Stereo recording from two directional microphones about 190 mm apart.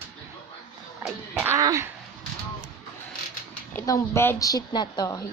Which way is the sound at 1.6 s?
15° right (ahead or behind).